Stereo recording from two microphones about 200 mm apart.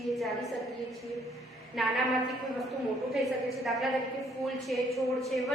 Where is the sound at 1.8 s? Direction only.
Centre (ahead or behind).